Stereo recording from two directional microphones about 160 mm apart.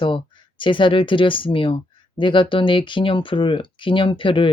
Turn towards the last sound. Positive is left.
turn(degrees=30)  # may be behind; listen again after turning